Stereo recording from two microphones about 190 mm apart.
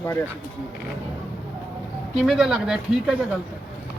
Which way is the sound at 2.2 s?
5° right (ahead or behind).